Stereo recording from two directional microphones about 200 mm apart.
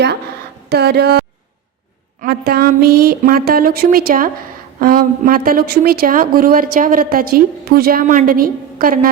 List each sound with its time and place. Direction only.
0.7 s a woman's voice: 55° right (ahead or behind)
2.2 s a woman's voice: 50° right (ahead or behind)